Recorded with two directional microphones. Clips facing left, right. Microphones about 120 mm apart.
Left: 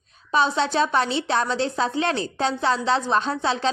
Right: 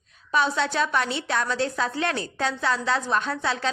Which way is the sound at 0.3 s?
25° left (ahead or behind).